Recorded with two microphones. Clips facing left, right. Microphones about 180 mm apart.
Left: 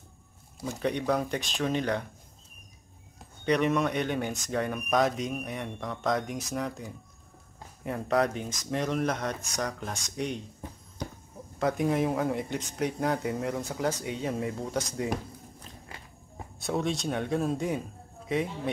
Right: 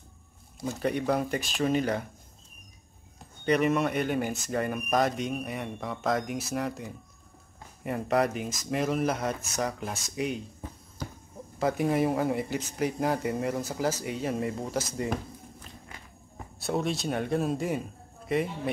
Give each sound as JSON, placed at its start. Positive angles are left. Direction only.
{"t": 0.7, "sound": "speech", "side_deg": -5}
{"t": 3.4, "sound": "speech", "side_deg": 0}
{"t": 11.5, "sound": "speech", "side_deg": -5}
{"t": 16.5, "sound": "speech", "side_deg": 0}